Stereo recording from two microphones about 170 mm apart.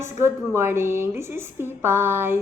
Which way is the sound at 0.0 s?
15° right (ahead or behind).